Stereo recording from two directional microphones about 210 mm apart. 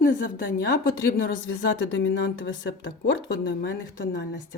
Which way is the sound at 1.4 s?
60° left (ahead or behind).